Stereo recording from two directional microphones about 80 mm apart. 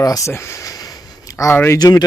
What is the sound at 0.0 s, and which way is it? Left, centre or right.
Speech, left.